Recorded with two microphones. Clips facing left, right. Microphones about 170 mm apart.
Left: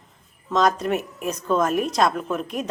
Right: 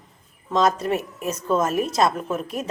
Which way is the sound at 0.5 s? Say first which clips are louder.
Even; centre (ahead or behind).